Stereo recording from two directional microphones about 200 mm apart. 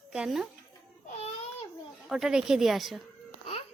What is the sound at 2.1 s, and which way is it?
Speech, 5° right (ahead or behind).